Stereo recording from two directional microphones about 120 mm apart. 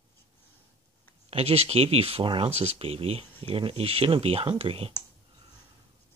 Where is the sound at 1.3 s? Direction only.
55° right (ahead or behind).